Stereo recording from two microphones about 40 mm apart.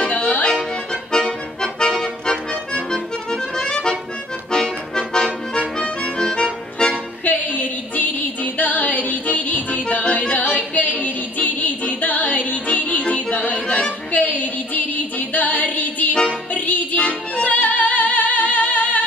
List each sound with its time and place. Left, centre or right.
0.0 s music: left
1.1 s accordion: centre
4.5 s music: left
7.2 s music: left
14.1 s female singing: left
16.5 s music: left